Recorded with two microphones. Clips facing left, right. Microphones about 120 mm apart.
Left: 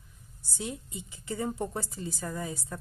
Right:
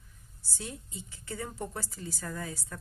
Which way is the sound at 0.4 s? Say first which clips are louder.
Left 5 dB; 15° left (ahead or behind).